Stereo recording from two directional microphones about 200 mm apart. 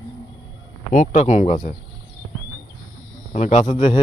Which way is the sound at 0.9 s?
40° left (ahead or behind).